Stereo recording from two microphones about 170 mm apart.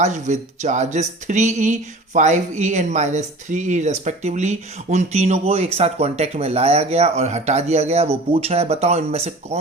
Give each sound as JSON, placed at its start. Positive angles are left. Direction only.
{"t": 0.0, "sound": "speech", "side_deg": -45}